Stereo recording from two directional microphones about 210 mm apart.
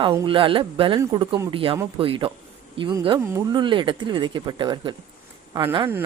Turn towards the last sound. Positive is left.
turn(degrees=-25)  # may be behind; listen again after turning